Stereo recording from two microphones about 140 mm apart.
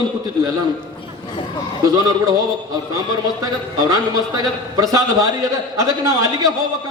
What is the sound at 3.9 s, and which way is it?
A man's voice, 25° right (ahead or behind).